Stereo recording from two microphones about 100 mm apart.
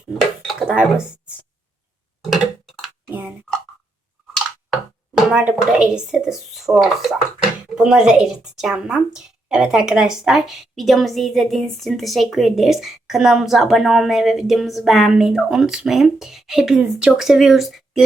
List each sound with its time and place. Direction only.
0.4 s dishes: 5° right (ahead or behind)
3.1 s a sound: 15° right (ahead or behind)
5.1 s a woman's voice: 10° right (ahead or behind)